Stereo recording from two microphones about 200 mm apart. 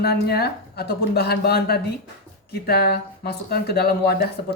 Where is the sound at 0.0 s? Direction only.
55° left (ahead or behind).